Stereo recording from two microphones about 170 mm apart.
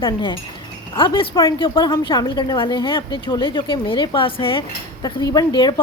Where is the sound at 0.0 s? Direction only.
25° left (ahead or behind).